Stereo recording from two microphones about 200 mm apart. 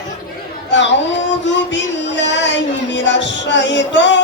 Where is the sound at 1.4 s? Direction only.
65° left (ahead or behind).